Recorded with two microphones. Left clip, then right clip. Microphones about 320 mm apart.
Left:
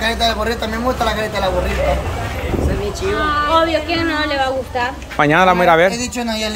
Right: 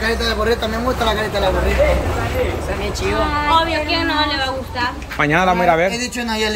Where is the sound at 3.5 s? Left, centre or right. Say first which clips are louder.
Left 1 dB; centre.